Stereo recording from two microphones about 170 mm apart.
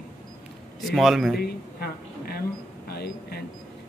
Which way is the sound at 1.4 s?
65° left (ahead or behind).